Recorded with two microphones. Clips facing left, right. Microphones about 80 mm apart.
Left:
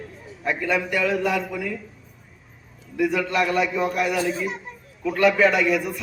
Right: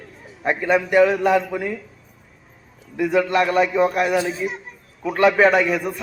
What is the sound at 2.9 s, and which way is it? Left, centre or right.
A man's voice, right.